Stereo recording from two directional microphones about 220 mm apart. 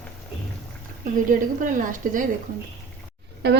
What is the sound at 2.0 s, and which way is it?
Speech, 40° right (ahead or behind).